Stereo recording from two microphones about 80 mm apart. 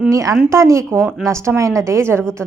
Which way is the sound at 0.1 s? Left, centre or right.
Right.